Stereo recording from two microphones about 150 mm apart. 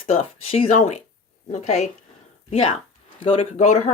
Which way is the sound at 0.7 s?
50° left (ahead or behind).